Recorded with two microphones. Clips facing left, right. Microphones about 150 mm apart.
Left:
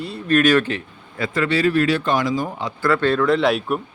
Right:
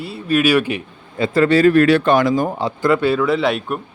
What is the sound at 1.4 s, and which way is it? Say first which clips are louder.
Speech: right 6 dB; 45° right (ahead or behind).